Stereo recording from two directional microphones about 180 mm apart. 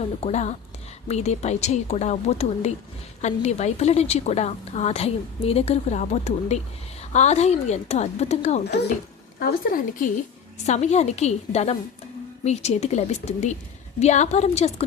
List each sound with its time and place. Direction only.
0.0 s a woman's voice: 35° left (ahead or behind)
9.4 s speech: 50° left (ahead or behind)
10.7 s a woman's voice: 40° left (ahead or behind)